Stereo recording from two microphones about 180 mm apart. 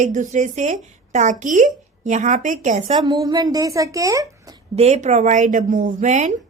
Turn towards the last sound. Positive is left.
turn(degrees=-40)  # may be behind; listen again after turning